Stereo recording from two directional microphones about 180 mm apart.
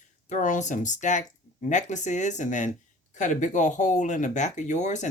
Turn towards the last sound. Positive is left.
turn(degrees=40)  # may be behind; listen again after turning